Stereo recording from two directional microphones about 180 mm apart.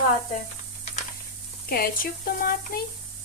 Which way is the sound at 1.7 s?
55° left (ahead or behind).